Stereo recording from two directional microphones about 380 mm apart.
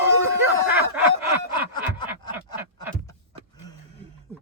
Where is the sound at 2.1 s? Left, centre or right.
Centre.